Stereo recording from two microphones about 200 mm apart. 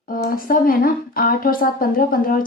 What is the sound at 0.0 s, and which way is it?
Speech, 45° left (ahead or behind).